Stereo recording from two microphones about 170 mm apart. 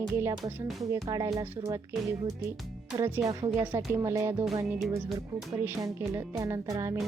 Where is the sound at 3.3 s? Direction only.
25° right (ahead or behind).